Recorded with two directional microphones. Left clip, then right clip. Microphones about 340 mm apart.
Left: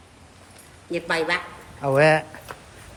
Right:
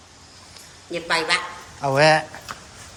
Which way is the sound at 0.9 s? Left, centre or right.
Left.